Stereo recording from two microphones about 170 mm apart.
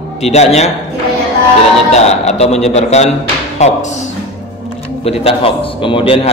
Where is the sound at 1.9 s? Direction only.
40° left (ahead or behind).